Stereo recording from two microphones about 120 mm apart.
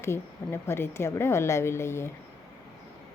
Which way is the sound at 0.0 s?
20° left (ahead or behind).